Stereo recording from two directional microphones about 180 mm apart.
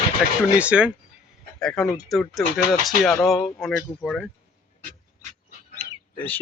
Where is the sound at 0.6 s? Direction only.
5° right (ahead or behind).